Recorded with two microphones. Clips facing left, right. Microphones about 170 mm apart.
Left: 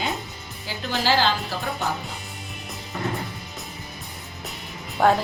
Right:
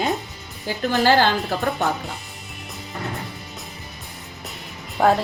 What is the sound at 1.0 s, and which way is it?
Speech, 55° right (ahead or behind).